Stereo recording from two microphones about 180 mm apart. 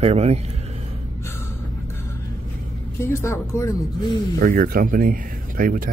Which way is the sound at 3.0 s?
15° left (ahead or behind).